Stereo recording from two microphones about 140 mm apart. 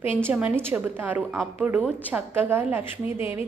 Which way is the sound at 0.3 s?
10° right (ahead or behind).